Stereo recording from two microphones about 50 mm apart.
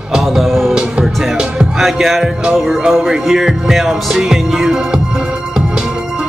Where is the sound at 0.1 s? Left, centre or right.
Centre.